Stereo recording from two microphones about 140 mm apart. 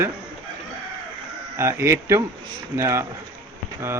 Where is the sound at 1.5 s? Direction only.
20° right (ahead or behind).